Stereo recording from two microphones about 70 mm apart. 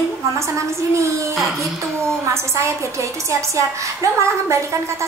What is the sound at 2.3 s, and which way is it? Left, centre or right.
A woman's voice, right.